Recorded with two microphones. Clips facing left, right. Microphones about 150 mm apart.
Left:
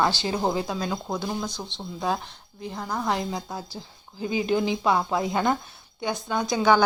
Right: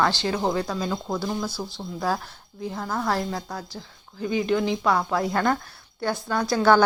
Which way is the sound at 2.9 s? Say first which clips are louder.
Right 1 dB; 15° left (ahead or behind).